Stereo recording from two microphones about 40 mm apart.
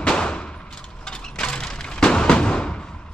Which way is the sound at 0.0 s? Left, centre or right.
Left.